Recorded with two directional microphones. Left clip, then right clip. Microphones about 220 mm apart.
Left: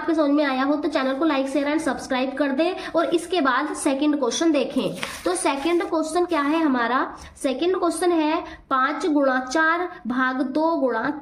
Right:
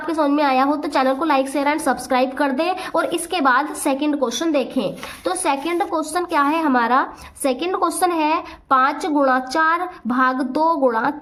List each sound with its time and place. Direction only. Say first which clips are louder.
0.1 s a woman's voice: right 3 dB; 30° right (ahead or behind)